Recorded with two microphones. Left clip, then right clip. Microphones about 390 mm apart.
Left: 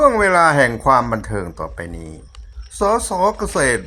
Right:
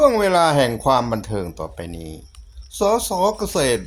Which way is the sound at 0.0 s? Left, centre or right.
Right.